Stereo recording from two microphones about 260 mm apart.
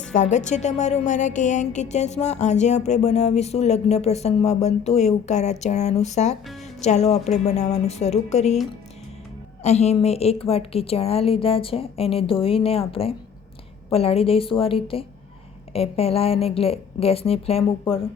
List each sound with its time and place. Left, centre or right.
0.1 s a woman's voice: left
9.6 s a woman's voice: left